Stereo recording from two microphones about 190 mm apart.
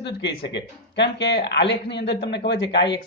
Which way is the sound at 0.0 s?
65° left (ahead or behind).